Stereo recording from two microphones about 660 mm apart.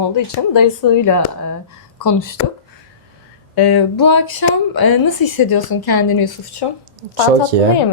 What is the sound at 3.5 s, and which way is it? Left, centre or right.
Speech, left.